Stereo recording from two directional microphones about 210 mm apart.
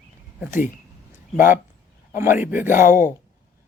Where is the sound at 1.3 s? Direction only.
10° right (ahead or behind).